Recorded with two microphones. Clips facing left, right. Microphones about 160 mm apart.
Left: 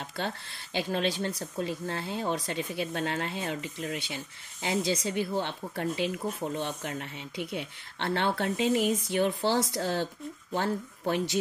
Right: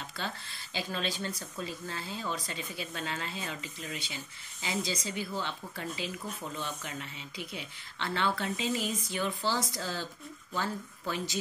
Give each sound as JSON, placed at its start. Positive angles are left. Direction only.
{"t": 0.2, "sound": "speech", "side_deg": 60}